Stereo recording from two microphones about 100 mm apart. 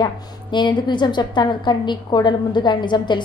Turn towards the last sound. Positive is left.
turn(degrees=50)  # may be behind; listen again after turning